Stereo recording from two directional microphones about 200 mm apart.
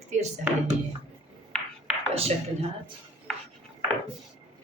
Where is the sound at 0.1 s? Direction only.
35° right (ahead or behind).